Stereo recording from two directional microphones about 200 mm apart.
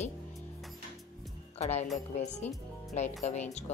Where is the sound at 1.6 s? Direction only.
35° left (ahead or behind).